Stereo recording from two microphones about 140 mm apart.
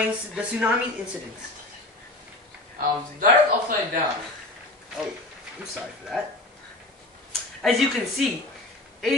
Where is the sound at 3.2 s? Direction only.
75° right (ahead or behind).